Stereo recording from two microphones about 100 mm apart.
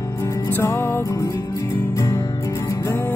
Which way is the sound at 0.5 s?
25° left (ahead or behind).